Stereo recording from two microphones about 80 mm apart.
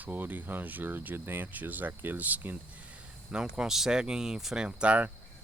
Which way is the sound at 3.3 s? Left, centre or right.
Centre.